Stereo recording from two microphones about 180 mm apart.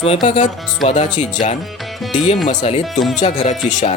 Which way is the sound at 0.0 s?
30° left (ahead or behind).